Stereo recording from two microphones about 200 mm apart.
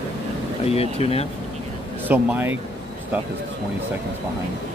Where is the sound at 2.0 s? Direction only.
10° right (ahead or behind).